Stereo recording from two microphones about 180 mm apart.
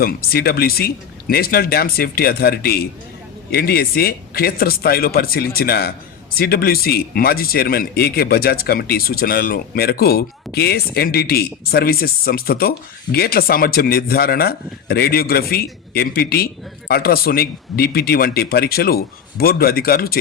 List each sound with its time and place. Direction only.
0.0 s speech: 55° left (ahead or behind)